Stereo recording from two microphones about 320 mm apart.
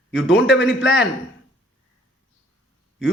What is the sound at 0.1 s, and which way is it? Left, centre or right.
Speech, left.